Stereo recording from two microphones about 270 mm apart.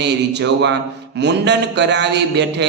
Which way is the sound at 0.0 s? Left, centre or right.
Right.